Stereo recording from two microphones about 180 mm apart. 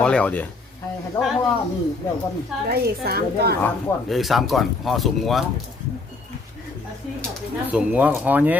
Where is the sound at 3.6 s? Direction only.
Centre (ahead or behind).